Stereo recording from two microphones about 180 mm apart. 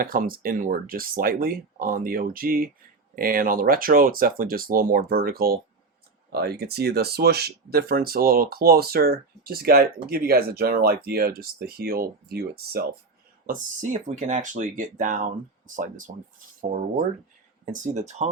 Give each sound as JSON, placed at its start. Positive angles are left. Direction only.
{"t": 0.0, "sound": "speech", "side_deg": -50}
{"t": 13.5, "sound": "speech", "side_deg": -45}
{"t": 17.7, "sound": "speech", "side_deg": -40}